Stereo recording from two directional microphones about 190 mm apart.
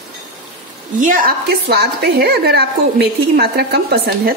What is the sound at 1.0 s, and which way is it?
A woman's voice, 45° right (ahead or behind).